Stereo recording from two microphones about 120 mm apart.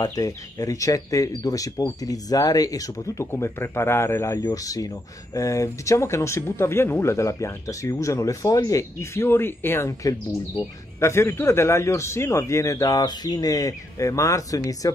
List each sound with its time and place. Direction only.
0.0 s speech: 30° left (ahead or behind)
4.4 s speech: 30° left (ahead or behind)